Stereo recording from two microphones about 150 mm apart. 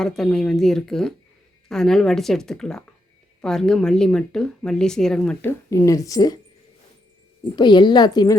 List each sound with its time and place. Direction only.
0.0 s speech: 5° left (ahead or behind); by 6.4 s 25° left (ahead or behind)
7.5 s a woman's voice: 30° left (ahead or behind)